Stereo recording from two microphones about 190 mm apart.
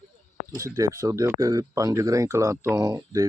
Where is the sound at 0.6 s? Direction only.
15° right (ahead or behind).